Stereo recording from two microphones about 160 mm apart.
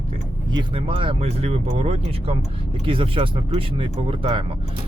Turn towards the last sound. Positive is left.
turn(degrees=-35)  # may be behind; listen again after turning